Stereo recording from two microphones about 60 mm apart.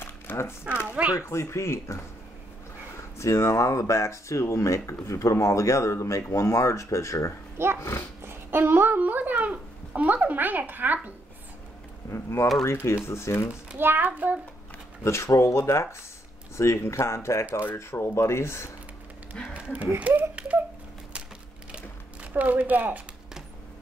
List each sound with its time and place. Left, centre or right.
0.0 s a sound: left
0.8 s speech: right
1.2 s speech: left
3.2 s speech: left
7.5 s speech: right
8.2 s a sound: right
10.7 s a child's voice: right
12.1 s speech: left
13.7 s a child's voice: right
15.0 s speech: left
19.5 s speech: right
21.7 s a sound: right